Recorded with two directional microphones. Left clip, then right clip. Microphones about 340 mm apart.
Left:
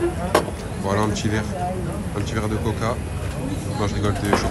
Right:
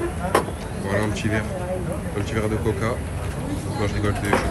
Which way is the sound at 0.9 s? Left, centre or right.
Centre.